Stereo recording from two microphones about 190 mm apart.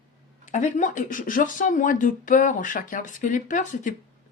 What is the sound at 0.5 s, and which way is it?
Speech, 40° left (ahead or behind).